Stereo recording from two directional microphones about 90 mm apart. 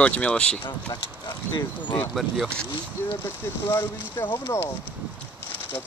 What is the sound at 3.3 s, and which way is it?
Speech, 25° left (ahead or behind).